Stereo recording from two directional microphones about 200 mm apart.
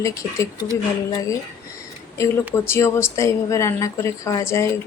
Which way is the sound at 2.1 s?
15° left (ahead or behind).